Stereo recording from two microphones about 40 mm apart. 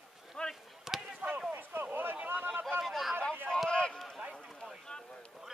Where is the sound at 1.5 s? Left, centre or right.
Right.